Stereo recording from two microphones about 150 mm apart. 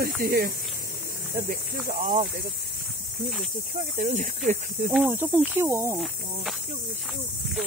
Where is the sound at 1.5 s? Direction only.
70° right (ahead or behind).